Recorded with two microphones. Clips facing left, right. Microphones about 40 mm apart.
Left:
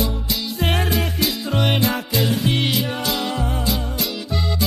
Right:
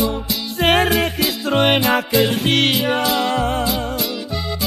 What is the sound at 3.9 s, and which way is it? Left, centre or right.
Music, centre.